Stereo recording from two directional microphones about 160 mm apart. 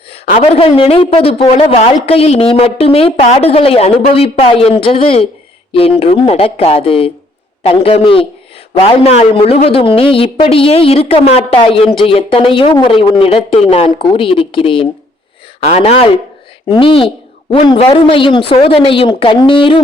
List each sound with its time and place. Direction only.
0.3 s a woman's voice: 40° left (ahead or behind)